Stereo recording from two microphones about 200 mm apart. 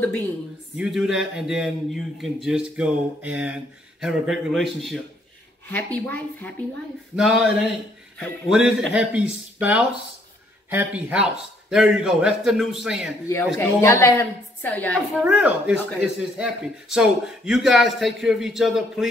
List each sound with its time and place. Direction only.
0.7 s a man's voice: 5° right (ahead or behind)
7.2 s a man's voice: 5° right (ahead or behind)
13.6 s a woman's voice: 10° left (ahead or behind)
15.2 s a man's voice: 5° right (ahead or behind)